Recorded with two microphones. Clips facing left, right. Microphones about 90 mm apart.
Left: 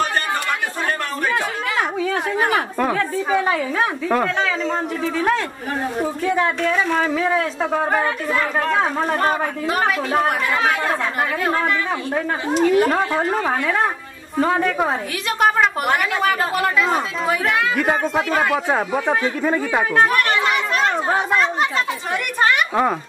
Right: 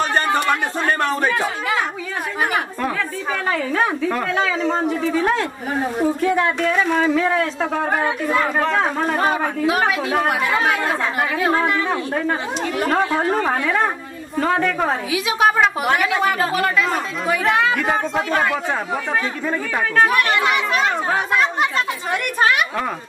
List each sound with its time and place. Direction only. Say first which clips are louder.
0.3 s a sound: right 4 dB; 25° right (ahead or behind)
2.8 s speech: left 3 dB; 15° left (ahead or behind)
4.4 s speech: right 2 dB; 5° right (ahead or behind)
12.8 s speech: even; centre (ahead or behind)
15.2 s speech: even; 5° right (ahead or behind); by 20.1 s 15° left (ahead or behind)
20.1 s children playing: right 1 dB; centre (ahead or behind)
21.3 s speech: even; centre (ahead or behind)